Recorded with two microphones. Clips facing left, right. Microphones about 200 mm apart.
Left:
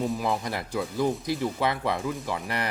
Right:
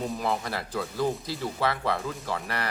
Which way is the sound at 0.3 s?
15° left (ahead or behind).